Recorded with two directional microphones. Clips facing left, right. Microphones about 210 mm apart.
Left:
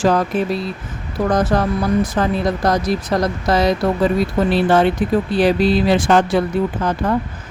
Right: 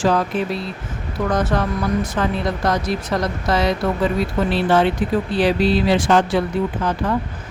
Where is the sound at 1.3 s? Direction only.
35° left (ahead or behind).